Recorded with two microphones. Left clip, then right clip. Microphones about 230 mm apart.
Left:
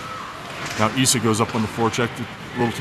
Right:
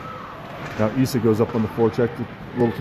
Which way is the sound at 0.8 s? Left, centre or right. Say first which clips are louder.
Left 1 dB; left.